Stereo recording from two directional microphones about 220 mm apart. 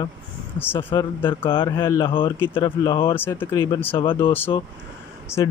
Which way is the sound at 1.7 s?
15° left (ahead or behind).